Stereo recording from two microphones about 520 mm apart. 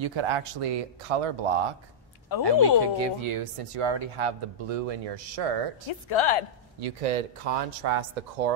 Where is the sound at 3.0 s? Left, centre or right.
Right.